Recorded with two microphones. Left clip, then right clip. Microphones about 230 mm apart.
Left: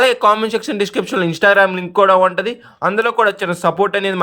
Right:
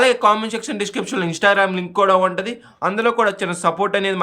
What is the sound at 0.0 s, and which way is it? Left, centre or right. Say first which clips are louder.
A man's voice: left 2 dB; left.